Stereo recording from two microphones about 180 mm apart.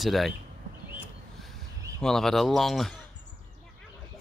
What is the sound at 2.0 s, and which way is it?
Speech, centre (ahead or behind).